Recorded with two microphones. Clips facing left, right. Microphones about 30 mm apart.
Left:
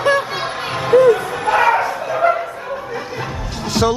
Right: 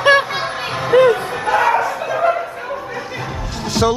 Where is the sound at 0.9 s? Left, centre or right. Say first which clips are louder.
Even; right.